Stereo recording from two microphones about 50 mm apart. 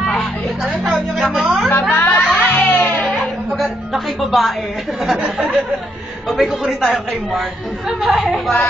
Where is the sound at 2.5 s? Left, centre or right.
Left.